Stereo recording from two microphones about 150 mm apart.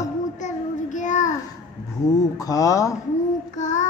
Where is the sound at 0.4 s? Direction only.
55° left (ahead or behind).